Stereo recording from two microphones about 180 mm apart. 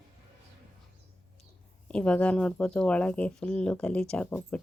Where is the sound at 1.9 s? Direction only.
5° left (ahead or behind).